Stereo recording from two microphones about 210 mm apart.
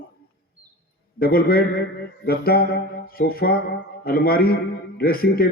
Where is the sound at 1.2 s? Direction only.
45° left (ahead or behind).